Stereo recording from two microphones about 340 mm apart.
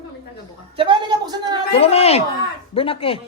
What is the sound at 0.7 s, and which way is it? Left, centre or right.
Speech, centre.